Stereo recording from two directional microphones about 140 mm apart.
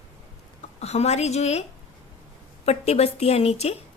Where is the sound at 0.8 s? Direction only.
50° left (ahead or behind).